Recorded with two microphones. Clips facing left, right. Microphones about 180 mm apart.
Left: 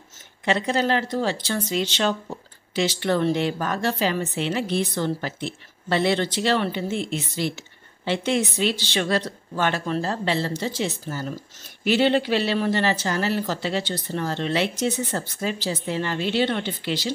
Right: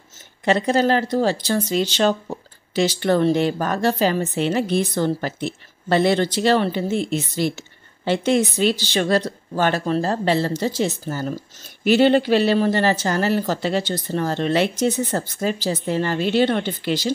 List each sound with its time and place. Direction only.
0.5 s speech: 40° right (ahead or behind)